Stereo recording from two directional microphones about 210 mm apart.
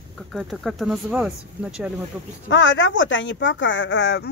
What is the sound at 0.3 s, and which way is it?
Speech, centre (ahead or behind).